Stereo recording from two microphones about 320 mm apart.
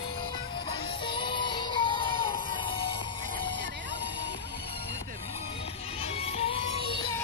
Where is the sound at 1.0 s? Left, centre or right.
Centre.